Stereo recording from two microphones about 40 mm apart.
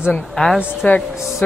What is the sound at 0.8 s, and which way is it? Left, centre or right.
Speech, left.